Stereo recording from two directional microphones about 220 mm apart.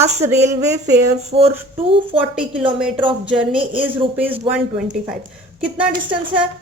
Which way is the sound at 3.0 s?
20° right (ahead or behind).